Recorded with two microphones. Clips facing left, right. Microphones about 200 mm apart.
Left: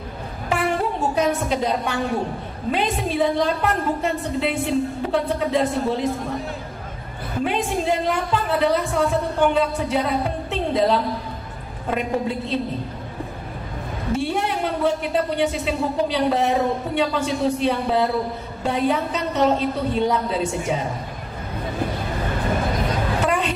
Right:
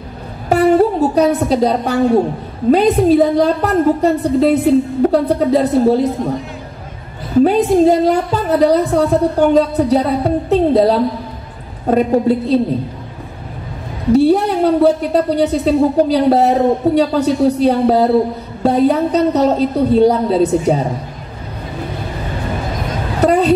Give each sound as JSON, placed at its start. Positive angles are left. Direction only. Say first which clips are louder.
{"t": 0.5, "sound": "a woman's voice", "louder": "right 12 dB", "side_deg": -40}
{"t": 7.4, "sound": "a woman's voice", "louder": "right 11 dB", "side_deg": -40}
{"t": 14.1, "sound": "a woman's voice", "louder": "right 12 dB", "side_deg": -40}
{"t": 23.2, "sound": "a sound", "louder": "right 12 dB", "side_deg": -40}